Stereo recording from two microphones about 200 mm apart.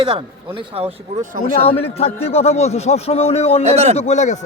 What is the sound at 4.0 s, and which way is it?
Speech, 35° left (ahead or behind).